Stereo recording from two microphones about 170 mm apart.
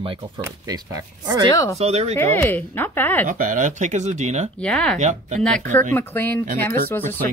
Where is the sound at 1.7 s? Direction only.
40° right (ahead or behind).